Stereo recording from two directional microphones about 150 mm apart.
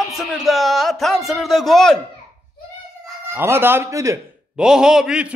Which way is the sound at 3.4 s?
15° right (ahead or behind).